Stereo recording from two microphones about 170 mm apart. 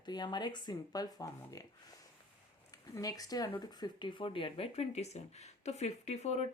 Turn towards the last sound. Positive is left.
turn(degrees=40)  # may be behind; listen again after turning